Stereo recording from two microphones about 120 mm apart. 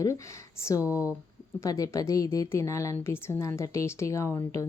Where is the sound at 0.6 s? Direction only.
25° left (ahead or behind).